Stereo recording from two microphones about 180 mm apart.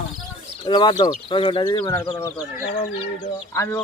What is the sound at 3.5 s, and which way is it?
Speech, 20° left (ahead or behind).